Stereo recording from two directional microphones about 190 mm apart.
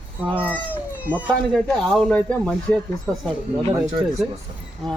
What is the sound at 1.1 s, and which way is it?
Speech, centre (ahead or behind).